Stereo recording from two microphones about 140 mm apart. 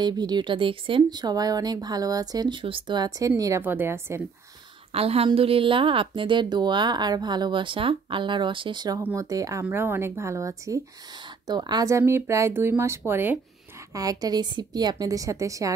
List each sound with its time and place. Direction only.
0.0 s speech: 30° right (ahead or behind)
4.9 s a woman's voice: 45° right (ahead or behind); by 13.4 s 15° right (ahead or behind)
13.9 s speech: 25° right (ahead or behind)